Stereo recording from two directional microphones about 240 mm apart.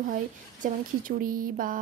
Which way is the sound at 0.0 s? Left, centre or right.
Right.